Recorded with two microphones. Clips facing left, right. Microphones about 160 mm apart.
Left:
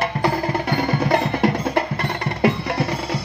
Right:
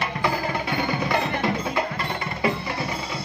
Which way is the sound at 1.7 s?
60° left (ahead or behind).